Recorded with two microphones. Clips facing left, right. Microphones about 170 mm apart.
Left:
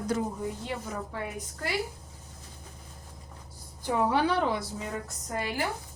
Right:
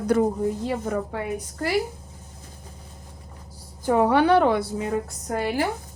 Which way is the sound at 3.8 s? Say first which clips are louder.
Right 7 dB; 65° right (ahead or behind).